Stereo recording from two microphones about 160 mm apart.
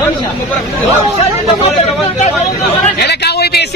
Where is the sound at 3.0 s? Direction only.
90° left.